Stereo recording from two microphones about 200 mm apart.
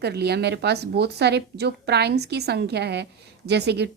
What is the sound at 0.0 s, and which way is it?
A woman's voice, 55° right (ahead or behind).